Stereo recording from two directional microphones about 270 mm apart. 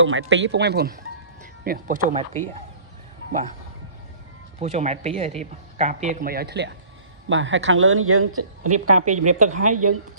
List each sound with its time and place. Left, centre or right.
0.0 s speech: right
4.6 s a woman's voice: right